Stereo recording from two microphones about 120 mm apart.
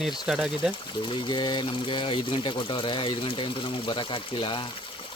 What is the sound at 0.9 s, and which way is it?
Speech, 45° left (ahead or behind).